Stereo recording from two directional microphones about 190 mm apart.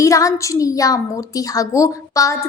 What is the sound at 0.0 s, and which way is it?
A woman's voice, 15° left (ahead or behind).